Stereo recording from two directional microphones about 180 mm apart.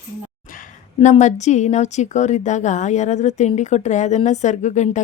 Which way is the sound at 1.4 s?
40° left (ahead or behind).